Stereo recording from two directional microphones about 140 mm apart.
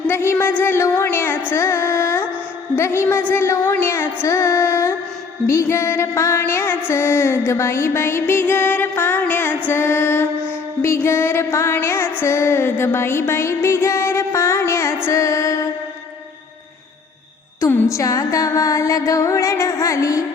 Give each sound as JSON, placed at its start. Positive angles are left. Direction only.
{"t": 0.1, "sound": "music", "side_deg": 15}
{"t": 17.6, "sound": "music", "side_deg": 15}